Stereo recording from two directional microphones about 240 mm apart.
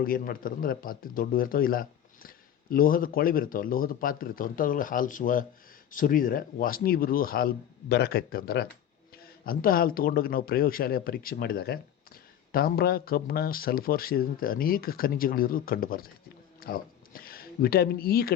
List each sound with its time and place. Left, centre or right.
0.0 s speech: left